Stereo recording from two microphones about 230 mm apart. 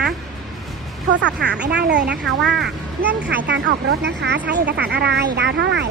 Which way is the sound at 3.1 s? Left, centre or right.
Right.